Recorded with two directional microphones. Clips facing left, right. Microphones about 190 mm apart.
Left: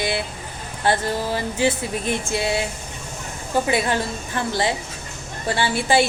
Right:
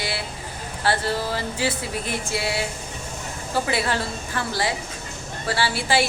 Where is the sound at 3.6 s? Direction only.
20° left (ahead or behind).